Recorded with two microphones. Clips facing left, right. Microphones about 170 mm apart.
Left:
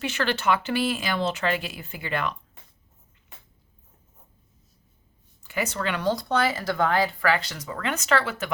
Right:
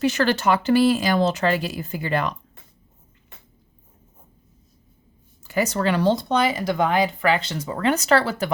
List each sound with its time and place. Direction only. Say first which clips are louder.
0.0 s speech: right 6 dB; 40° right (ahead or behind)
5.4 s speech: right 6 dB; 40° right (ahead or behind)